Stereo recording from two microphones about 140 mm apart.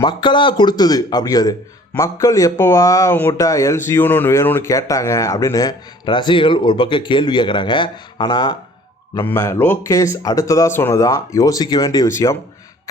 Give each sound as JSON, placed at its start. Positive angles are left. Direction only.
{"t": 0.0, "sound": "speech", "side_deg": 35}
{"t": 9.1, "sound": "speech", "side_deg": 20}